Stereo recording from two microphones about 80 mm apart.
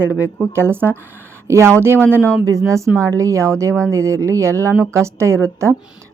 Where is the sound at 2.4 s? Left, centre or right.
Right.